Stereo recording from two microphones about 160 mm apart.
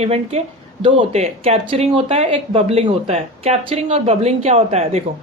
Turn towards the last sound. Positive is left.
turn(degrees=-40)  # may be behind; listen again after turning